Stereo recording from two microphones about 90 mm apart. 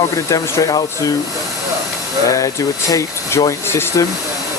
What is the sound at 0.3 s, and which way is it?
Speech, 40° left (ahead or behind).